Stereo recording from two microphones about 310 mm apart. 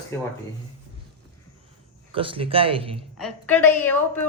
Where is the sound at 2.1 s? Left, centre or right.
Centre.